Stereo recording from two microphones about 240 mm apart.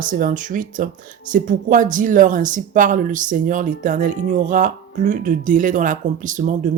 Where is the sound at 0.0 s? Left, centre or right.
Right.